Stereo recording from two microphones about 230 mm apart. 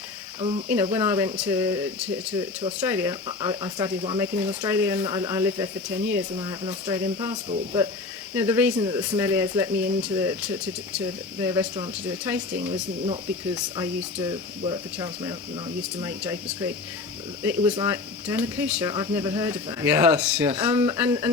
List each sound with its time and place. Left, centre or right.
0.3 s speech: right
0.7 s speech: centre
8.4 s speech: centre
13.1 s speech: centre